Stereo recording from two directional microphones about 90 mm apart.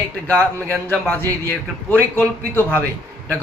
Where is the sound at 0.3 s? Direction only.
20° left (ahead or behind).